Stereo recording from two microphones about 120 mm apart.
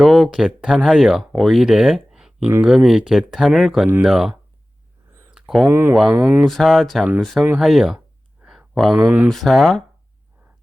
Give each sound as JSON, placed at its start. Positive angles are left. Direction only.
{"t": 0.0, "sound": "speech", "side_deg": 0}
{"t": 5.3, "sound": "a sound", "side_deg": -5}
{"t": 5.6, "sound": "speech", "side_deg": -20}
{"t": 5.9, "sound": "speech", "side_deg": 0}